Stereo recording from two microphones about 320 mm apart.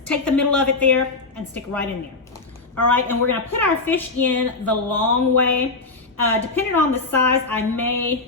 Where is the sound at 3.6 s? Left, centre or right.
Centre.